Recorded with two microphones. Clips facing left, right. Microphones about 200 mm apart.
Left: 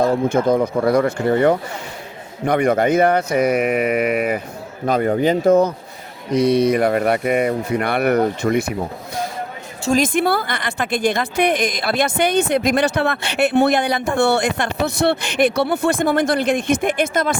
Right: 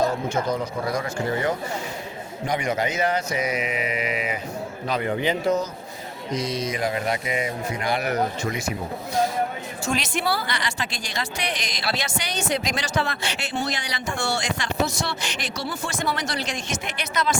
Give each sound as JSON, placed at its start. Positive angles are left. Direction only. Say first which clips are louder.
{"t": 0.0, "sound": "a woman's voice", "louder": "left 7 dB", "side_deg": 55}
{"t": 4.9, "sound": "a woman's voice", "louder": "left 8 dB", "side_deg": 45}
{"t": 9.9, "sound": "a woman's voice", "louder": "left 9 dB", "side_deg": 50}